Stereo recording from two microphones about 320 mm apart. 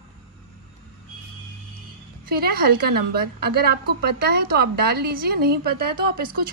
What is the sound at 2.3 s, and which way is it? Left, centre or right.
A woman's voice, right.